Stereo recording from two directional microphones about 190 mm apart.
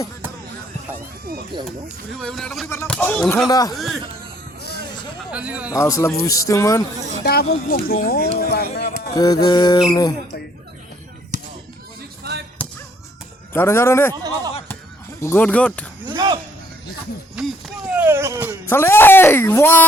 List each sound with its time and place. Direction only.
1.5 s speech: 25° right (ahead or behind)
2.2 s speech: 5° left (ahead or behind)
3.4 s mantra: 20° left (ahead or behind)
3.8 s speech: centre (ahead or behind)
5.3 s a man's voice: 5° right (ahead or behind)
5.7 s speech: 15° left (ahead or behind)
7.3 s speech: 55° left (ahead or behind)
9.1 s mantra: 20° left (ahead or behind)
11.3 s chop: 40° right (ahead or behind)
13.5 s speech: 10° left (ahead or behind)
15.2 s speech: 10° left (ahead or behind)
16.0 s speech: 25° right (ahead or behind)
17.3 s speech: 5° right (ahead or behind)
18.7 s speech: 10° left (ahead or behind)